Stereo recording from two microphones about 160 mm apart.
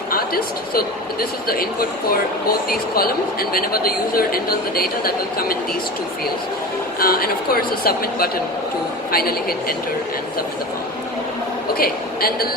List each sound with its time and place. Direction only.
0.1 s speech: 65° left (ahead or behind)
7.0 s speech: 65° left (ahead or behind)
11.7 s speech: 70° left (ahead or behind)